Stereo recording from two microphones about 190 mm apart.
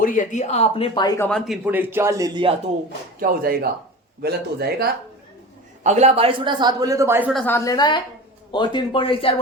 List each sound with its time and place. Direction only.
0.0 s speech: 45° left (ahead or behind); by 1.3 s 20° left (ahead or behind)
1.3 s speech: 5° left (ahead or behind)
1.6 s speech: 10° right (ahead or behind)
3.2 s speech: 50° right (ahead or behind)
5.8 s speech: 35° right (ahead or behind); by 7.3 s 10° right (ahead or behind)
7.3 s a woman's voice: 10° left (ahead or behind); by 9.3 s 25° left (ahead or behind)